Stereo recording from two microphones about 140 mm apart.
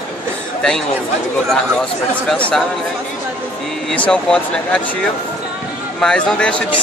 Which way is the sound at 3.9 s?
5° left (ahead or behind).